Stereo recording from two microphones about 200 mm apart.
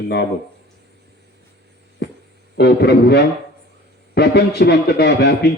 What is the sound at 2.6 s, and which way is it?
A man's voice, 55° left (ahead or behind).